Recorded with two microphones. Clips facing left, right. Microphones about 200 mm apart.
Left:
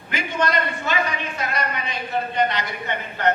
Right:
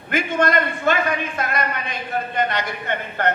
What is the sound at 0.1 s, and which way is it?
A man's voice, 50° right (ahead or behind).